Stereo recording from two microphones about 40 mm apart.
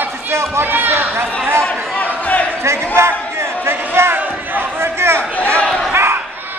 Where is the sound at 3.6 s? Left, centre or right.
Right.